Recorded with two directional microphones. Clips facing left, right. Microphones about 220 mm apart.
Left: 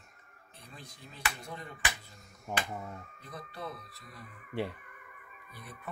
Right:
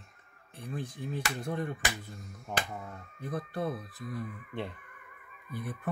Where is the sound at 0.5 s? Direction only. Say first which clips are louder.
Right 13 dB; 55° right (ahead or behind).